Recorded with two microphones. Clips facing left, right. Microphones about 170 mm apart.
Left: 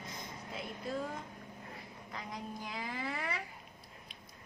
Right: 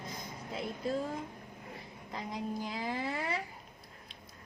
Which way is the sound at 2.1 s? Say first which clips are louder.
Right 6 dB; 30° right (ahead or behind).